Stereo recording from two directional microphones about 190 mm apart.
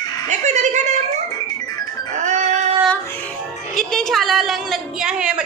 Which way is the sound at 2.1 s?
40° right (ahead or behind).